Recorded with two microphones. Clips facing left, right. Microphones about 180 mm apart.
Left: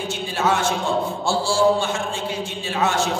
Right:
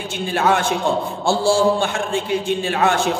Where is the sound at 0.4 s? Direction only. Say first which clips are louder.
Right 3 dB; 60° right (ahead or behind).